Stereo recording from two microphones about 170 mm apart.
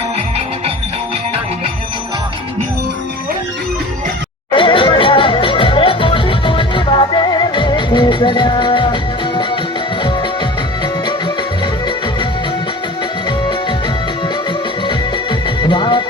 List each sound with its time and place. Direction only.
4.5 s music: 30° left (ahead or behind)
13.2 s music: 30° left (ahead or behind)
14.8 s music: 30° left (ahead or behind)